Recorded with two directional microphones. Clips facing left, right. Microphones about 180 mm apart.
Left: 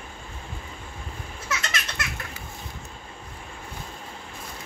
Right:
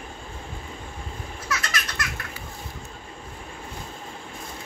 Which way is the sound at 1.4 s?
25° left (ahead or behind).